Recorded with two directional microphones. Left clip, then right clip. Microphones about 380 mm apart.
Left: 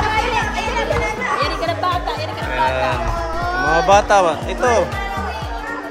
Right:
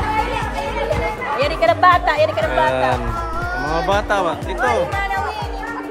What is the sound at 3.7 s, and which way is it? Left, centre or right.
Speech, centre.